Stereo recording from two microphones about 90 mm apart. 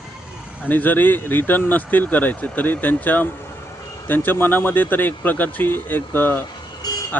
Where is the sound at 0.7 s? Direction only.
20° left (ahead or behind).